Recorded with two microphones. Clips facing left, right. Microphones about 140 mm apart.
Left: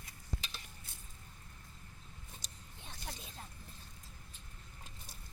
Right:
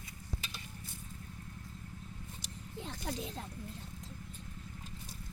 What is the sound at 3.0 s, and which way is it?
Speech, 70° right (ahead or behind).